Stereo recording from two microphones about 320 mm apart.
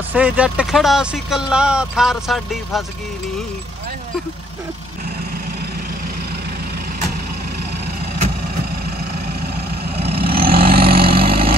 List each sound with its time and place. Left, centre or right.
0.1 s speech: centre
9.9 s vehicle: right